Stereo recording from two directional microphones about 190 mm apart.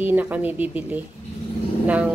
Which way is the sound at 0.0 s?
10° right (ahead or behind).